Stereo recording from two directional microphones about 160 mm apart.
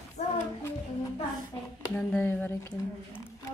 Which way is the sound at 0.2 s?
40° left (ahead or behind).